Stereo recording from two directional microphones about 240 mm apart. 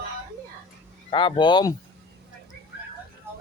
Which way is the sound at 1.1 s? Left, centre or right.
Left.